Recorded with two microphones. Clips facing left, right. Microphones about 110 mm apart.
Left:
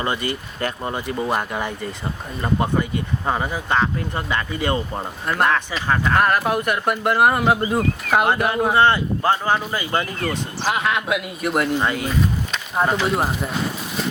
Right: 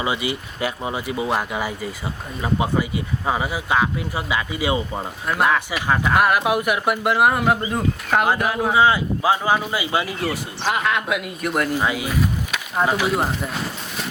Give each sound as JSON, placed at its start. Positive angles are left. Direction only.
{"t": 0.0, "sound": "speech", "side_deg": -10}